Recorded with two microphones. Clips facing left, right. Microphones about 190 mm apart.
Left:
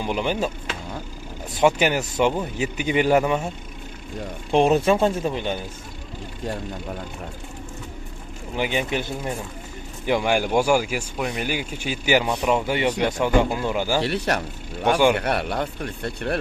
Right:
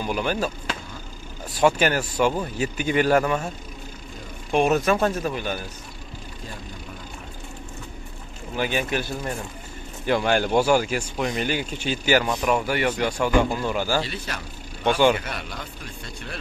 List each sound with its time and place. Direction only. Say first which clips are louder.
0.0 s speech: left 1 dB; 20° left (ahead or behind)
1.7 s speech: left 1 dB; 15° left (ahead or behind)
4.5 s speech: left 2 dB; 30° left (ahead or behind)
8.5 s speech: left 1 dB; 20° left (ahead or behind)
14.0 s speech: left 10 dB; 70° left (ahead or behind)